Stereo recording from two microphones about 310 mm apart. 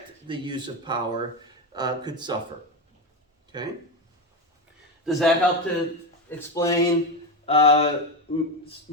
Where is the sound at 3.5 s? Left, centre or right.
Centre.